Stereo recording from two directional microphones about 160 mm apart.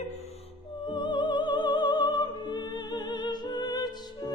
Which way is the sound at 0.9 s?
30° left (ahead or behind).